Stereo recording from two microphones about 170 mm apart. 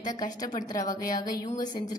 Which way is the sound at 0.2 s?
25° left (ahead or behind).